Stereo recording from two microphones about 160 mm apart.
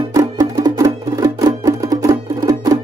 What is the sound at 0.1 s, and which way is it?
Music, 25° right (ahead or behind).